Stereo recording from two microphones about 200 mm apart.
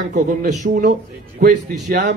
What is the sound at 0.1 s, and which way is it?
Speech, 40° right (ahead or behind).